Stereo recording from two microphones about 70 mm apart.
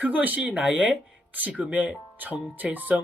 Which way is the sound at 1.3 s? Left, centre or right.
Right.